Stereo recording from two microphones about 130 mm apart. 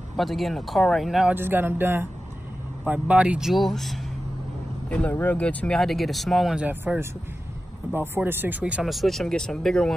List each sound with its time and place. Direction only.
0.1 s speech: centre (ahead or behind)
1.3 s speech: 15° right (ahead or behind); by 9.9 s 5° left (ahead or behind)